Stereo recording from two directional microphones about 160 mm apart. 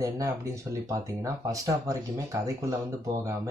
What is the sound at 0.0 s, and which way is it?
Speech, 20° right (ahead or behind).